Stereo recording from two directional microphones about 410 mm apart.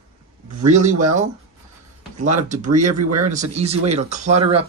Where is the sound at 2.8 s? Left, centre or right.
Right.